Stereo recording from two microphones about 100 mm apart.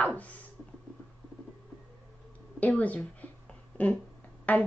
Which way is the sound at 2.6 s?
15° left (ahead or behind).